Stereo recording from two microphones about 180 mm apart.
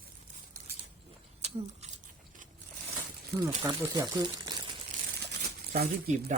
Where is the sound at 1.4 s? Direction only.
40° right (ahead or behind).